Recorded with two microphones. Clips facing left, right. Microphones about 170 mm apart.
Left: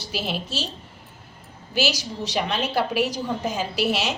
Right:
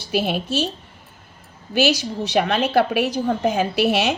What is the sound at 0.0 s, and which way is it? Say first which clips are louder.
Speech: right 7 dB; 55° right (ahead or behind).